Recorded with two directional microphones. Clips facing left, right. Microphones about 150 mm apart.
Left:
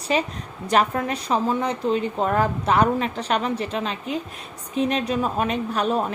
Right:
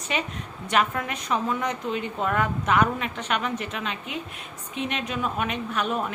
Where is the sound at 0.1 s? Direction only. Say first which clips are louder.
Left 6 dB; 35° left (ahead or behind).